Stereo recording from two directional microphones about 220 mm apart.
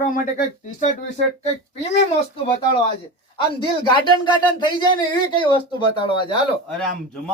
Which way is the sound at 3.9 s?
20° left (ahead or behind).